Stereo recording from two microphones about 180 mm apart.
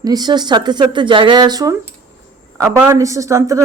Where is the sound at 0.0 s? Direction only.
20° right (ahead or behind).